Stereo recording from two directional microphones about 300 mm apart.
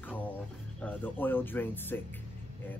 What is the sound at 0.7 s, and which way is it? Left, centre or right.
Speech, centre.